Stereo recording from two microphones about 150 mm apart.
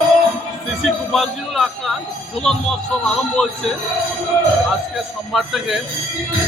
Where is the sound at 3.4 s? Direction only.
Centre (ahead or behind).